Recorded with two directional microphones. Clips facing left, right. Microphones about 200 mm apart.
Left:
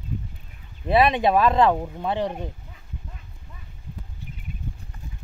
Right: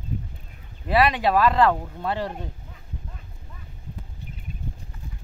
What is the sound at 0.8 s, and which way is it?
Speech, 20° left (ahead or behind).